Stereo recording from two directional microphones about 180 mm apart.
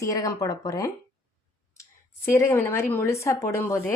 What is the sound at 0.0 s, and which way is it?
Speech, 20° left (ahead or behind).